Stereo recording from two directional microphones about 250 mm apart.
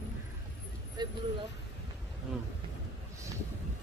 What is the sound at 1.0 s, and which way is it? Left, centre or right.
Speech, centre.